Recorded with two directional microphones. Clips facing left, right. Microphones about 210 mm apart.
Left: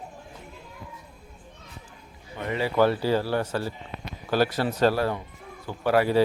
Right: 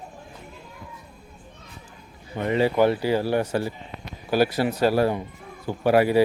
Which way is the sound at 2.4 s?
20° right (ahead or behind).